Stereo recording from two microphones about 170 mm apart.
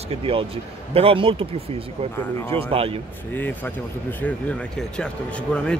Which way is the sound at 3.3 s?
10° left (ahead or behind).